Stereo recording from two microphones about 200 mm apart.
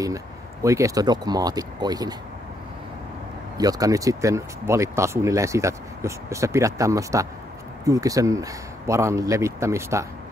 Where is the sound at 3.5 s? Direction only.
20° right (ahead or behind).